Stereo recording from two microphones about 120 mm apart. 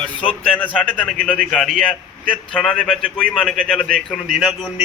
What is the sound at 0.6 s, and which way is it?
A man's voice, 10° left (ahead or behind).